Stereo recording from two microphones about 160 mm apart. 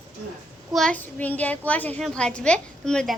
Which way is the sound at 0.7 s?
5° left (ahead or behind).